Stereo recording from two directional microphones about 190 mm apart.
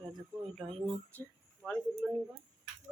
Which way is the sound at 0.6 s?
5° left (ahead or behind).